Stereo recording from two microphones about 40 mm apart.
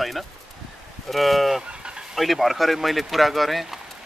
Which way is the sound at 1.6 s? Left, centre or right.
Right.